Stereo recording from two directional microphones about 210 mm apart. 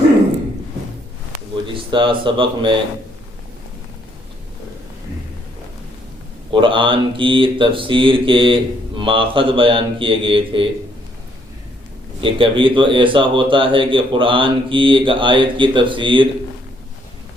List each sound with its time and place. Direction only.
1.7 s speech: 25° right (ahead or behind)
6.5 s speech: 25° right (ahead or behind)
12.2 s speech: 25° right (ahead or behind)